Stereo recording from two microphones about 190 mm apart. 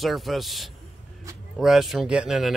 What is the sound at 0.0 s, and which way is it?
Speech, centre (ahead or behind).